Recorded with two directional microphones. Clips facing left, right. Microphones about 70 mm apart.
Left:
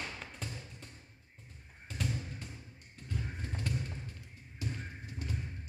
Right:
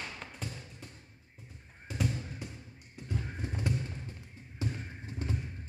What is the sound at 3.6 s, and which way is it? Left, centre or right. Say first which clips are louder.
Thump: right 4 dB; centre.